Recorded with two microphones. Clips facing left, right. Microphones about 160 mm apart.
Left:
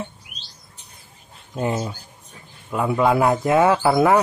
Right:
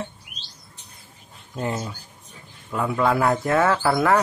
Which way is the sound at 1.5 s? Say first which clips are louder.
Left 4 dB; 25° left (ahead or behind).